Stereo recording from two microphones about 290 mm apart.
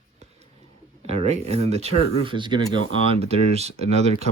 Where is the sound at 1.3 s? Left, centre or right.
Right.